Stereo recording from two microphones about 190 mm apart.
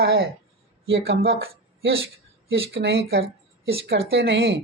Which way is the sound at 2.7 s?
60° right (ahead or behind).